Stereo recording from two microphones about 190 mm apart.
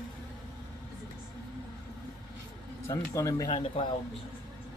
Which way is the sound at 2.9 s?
15° left (ahead or behind).